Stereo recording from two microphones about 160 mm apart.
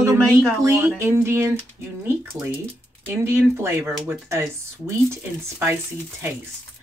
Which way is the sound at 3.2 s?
15° right (ahead or behind).